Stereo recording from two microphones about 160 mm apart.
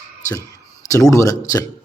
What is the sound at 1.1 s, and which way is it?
Speech, 20° left (ahead or behind).